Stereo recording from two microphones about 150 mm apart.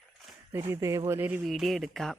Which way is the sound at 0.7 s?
20° right (ahead or behind).